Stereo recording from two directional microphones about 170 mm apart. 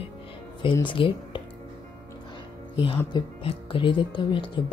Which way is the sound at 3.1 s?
30° left (ahead or behind).